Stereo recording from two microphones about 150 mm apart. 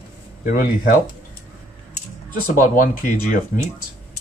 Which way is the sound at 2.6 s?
65° left (ahead or behind).